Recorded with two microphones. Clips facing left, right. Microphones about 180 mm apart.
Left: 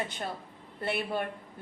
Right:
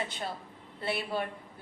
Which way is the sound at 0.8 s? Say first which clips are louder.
Left 1 dB; 50° left (ahead or behind).